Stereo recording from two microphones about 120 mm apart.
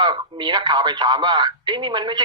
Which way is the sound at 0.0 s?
35° right (ahead or behind).